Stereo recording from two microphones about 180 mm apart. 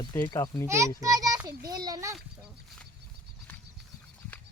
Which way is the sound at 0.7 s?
15° right (ahead or behind).